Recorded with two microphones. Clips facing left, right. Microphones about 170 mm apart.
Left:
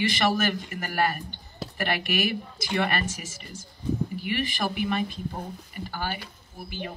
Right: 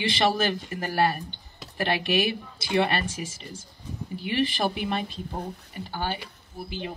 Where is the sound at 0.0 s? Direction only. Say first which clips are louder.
Even; 30° right (ahead or behind).